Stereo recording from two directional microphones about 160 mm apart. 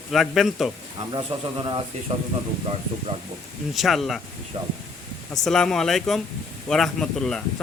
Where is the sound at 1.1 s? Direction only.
25° right (ahead or behind).